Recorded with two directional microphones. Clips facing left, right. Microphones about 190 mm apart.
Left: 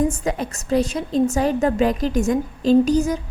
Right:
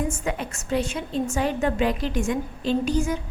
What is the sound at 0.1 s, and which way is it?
A woman's voice, 35° left (ahead or behind).